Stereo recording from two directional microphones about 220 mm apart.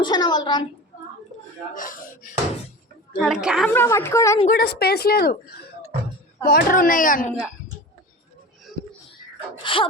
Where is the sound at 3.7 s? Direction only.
10° left (ahead or behind).